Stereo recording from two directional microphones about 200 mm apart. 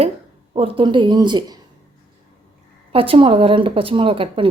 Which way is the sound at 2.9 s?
25° right (ahead or behind).